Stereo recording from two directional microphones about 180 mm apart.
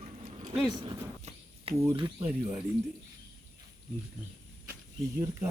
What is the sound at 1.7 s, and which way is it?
Speech, 35° right (ahead or behind).